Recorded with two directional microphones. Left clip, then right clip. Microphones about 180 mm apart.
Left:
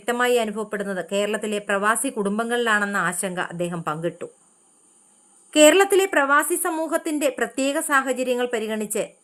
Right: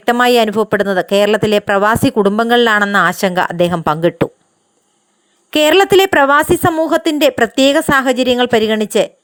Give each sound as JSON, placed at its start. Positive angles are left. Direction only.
{"t": 0.0, "sound": "speech", "side_deg": -40}
{"t": 5.5, "sound": "a woman's voice", "side_deg": -45}